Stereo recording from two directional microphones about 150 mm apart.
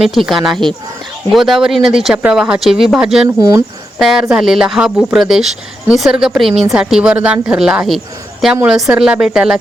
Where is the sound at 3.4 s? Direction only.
25° right (ahead or behind).